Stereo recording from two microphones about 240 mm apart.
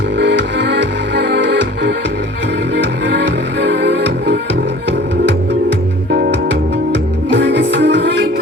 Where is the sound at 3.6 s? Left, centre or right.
Right.